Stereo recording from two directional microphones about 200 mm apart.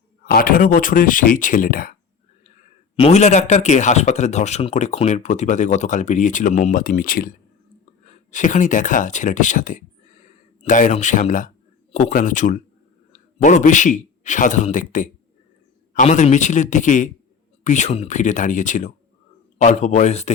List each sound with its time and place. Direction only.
0.3 s speech: 45° left (ahead or behind)
2.9 s speech: 30° left (ahead or behind)